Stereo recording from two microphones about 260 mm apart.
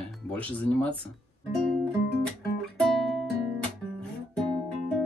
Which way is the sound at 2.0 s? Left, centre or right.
Left.